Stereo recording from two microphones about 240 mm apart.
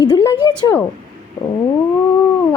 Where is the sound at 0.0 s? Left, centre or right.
Centre.